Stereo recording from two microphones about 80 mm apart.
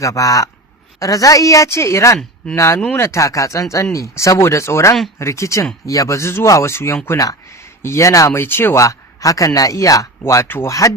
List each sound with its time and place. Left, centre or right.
0.0 s speech: left
8.3 s speech: left
8.8 s speech: left